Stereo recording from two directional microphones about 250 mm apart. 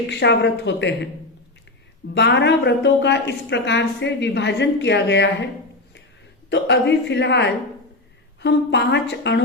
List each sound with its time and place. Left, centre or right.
0.1 s a woman's voice: left
2.1 s a woman's voice: left
6.5 s a woman's voice: left